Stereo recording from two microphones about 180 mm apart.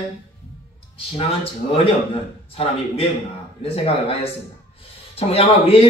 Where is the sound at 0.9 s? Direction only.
30° left (ahead or behind).